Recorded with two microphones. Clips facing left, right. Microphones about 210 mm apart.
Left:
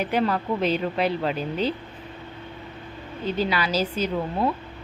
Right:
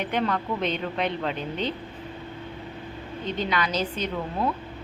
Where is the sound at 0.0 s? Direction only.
5° left (ahead or behind).